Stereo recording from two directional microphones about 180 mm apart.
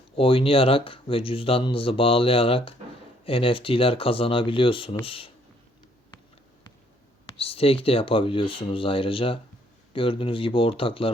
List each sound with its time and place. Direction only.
0.2 s speech: 30° left (ahead or behind)
7.3 s speech: 30° left (ahead or behind)